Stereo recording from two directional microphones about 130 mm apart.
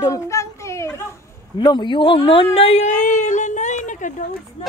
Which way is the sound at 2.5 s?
50° left (ahead or behind).